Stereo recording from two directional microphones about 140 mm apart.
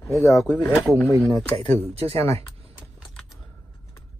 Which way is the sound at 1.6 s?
50° right (ahead or behind).